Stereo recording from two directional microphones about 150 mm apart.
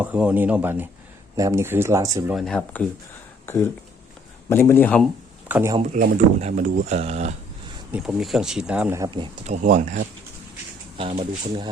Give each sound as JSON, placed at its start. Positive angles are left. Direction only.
{"t": 0.0, "sound": "speech", "side_deg": -10}
{"t": 2.3, "sound": "speech", "side_deg": 0}
{"t": 3.4, "sound": "speech", "side_deg": 15}
{"t": 5.5, "sound": "speech", "side_deg": -15}
{"t": 5.9, "sound": "speech", "side_deg": -55}
{"t": 7.9, "sound": "speech", "side_deg": 0}
{"t": 9.0, "sound": "speech", "side_deg": -35}
{"t": 9.5, "sound": "speech", "side_deg": -55}